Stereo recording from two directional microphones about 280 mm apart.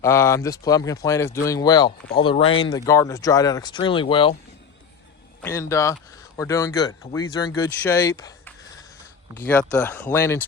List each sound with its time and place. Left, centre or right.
0.0 s speech: centre
5.4 s speech: centre